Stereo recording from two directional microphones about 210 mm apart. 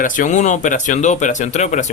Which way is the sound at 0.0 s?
35° left (ahead or behind).